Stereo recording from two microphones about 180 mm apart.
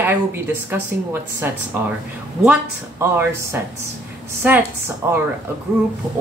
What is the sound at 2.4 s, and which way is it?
Speech, 10° right (ahead or behind).